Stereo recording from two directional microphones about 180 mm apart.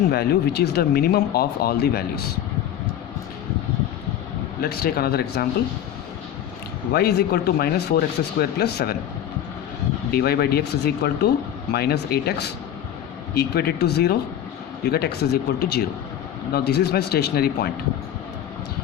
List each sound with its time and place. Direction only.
0.1 s speech: 60° left (ahead or behind)
4.6 s speech: 60° left (ahead or behind)
6.9 s speech: 65° left (ahead or behind)
10.1 s speech: 60° left (ahead or behind)